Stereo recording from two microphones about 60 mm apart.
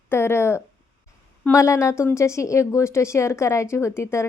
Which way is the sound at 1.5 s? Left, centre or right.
Left.